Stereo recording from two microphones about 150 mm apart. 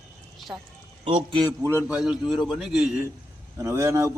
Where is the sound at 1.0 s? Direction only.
35° right (ahead or behind).